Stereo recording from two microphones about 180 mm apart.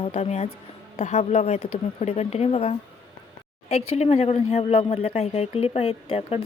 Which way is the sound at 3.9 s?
35° left (ahead or behind).